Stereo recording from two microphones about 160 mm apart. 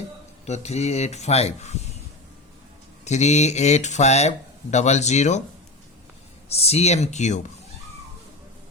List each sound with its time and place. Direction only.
0.4 s speech: 45° left (ahead or behind)
3.0 s speech: 45° left (ahead or behind)
6.5 s speech: 40° left (ahead or behind)